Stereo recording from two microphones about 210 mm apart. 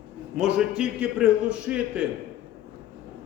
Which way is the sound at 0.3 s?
5° right (ahead or behind).